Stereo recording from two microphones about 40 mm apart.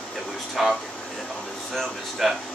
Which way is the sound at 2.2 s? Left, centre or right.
Centre.